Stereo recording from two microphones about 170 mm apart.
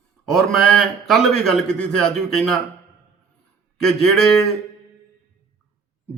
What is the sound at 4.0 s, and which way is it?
Speech, 5° left (ahead or behind).